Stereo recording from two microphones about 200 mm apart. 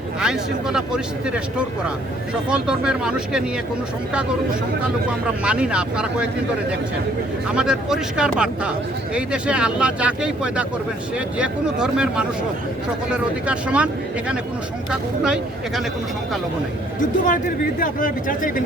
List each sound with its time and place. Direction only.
0.2 s speech: 5° right (ahead or behind)
5.4 s speech: 5° right (ahead or behind)
7.4 s speech: 5° right (ahead or behind)
17.0 s speech: 40° left (ahead or behind)